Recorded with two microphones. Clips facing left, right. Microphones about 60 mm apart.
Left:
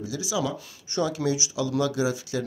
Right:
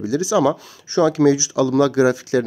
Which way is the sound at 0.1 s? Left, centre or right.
Right.